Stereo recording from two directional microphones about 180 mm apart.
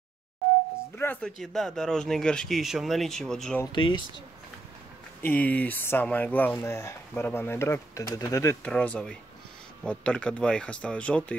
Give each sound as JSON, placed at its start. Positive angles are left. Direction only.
{"t": 0.9, "sound": "speech", "side_deg": 10}
{"t": 3.7, "sound": "speech", "side_deg": 25}
{"t": 5.2, "sound": "speech", "side_deg": 10}